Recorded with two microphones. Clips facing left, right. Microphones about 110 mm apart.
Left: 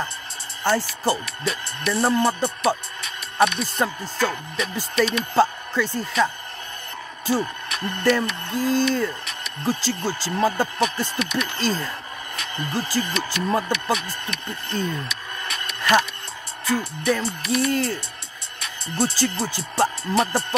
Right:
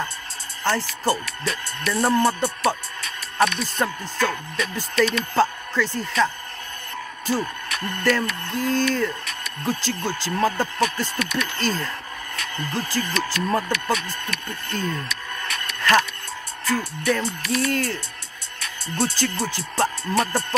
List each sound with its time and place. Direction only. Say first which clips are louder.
0.7 s speech: left 1 dB; 15° left (ahead or behind)
7.8 s speech: left 2 dB; 20° left (ahead or behind)
10.3 s speech: left 1 dB; 15° left (ahead or behind)
12.4 s music: even; 25° left (ahead or behind)
13.0 s speech: right 1 dB; 20° left (ahead or behind)